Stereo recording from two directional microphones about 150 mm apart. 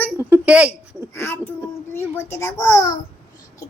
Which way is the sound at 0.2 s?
10° right (ahead or behind).